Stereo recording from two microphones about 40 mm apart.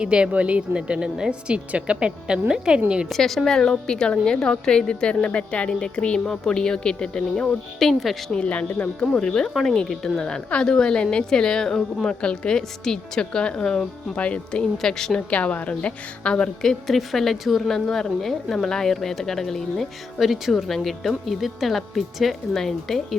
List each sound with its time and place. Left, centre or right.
0.0 s a woman's voice: right
3.1 s a woman's voice: centre; by 6.1 s left
6.1 s a woman's voice: centre
7.8 s speech: centre
8.4 s a woman's voice: left
9.1 s a woman's voice: centre
12.0 s a woman's voice: left
14.2 s a woman's voice: left
14.8 s a woman's voice: centre
15.3 s a woman's voice: left
16.6 s a woman's voice: centre
20.1 s speech: centre